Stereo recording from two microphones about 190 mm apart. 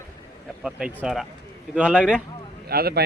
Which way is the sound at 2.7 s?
55° right (ahead or behind).